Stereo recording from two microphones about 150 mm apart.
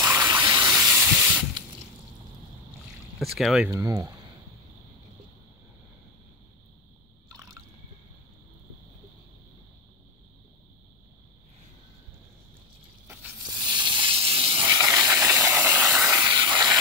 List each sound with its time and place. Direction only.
0.0 s water: 25° right (ahead or behind)
0.8 s spray: 10° right (ahead or behind)
3.2 s speech: centre (ahead or behind)
3.7 s speech: 25° right (ahead or behind)
13.0 s a sound: 15° right (ahead or behind)
13.6 s hiss: 30° right (ahead or behind)
14.7 s steam: 20° right (ahead or behind)
16.2 s vehicle: 30° right (ahead or behind)